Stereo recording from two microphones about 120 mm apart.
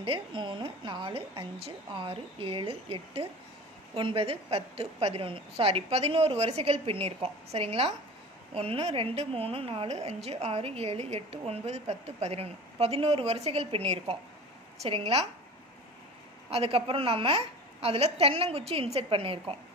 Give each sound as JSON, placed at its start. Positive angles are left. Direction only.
{"t": 0.0, "sound": "a woman's voice", "side_deg": -45}
{"t": 16.4, "sound": "a woman's voice", "side_deg": -55}